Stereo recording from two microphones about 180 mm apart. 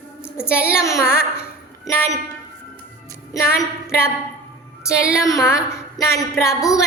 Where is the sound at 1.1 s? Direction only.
55° left (ahead or behind).